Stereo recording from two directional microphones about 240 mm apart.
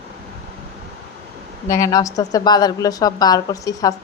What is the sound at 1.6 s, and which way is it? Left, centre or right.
A woman's voice, centre.